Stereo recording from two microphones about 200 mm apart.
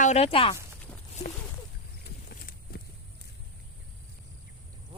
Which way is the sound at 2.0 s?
45° left (ahead or behind).